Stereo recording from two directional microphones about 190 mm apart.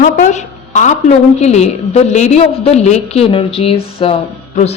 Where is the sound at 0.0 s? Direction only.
40° left (ahead or behind).